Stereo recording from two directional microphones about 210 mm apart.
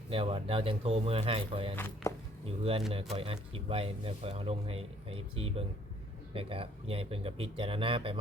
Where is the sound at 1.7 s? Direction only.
10° left (ahead or behind).